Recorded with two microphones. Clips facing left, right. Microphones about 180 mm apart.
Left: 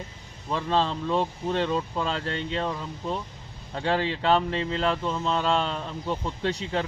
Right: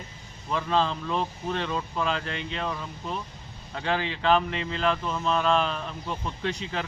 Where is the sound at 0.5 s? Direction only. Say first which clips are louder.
Even; 25° left (ahead or behind).